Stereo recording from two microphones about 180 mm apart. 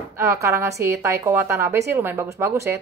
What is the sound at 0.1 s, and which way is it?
A woman's voice, 15° right (ahead or behind).